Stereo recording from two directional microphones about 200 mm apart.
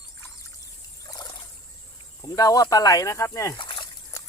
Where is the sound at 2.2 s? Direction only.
20° left (ahead or behind).